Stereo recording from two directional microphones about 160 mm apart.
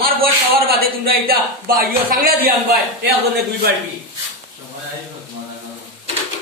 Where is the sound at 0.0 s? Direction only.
70° right (ahead or behind).